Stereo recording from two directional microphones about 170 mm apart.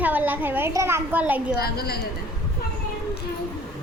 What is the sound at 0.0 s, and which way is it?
A woman's voice, 10° right (ahead or behind).